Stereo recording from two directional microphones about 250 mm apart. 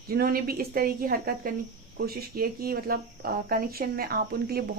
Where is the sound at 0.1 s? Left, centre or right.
Right.